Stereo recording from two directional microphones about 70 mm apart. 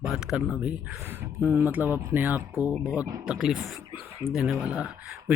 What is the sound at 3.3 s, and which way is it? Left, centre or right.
Speech, centre.